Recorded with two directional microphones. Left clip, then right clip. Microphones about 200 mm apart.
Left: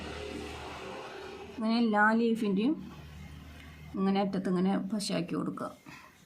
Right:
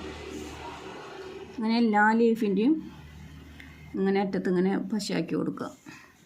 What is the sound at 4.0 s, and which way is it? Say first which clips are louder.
Speech: right 4 dB; 10° right (ahead or behind).